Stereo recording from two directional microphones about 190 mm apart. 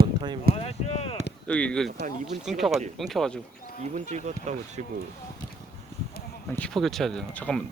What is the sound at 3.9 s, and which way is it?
Speech, 40° right (ahead or behind).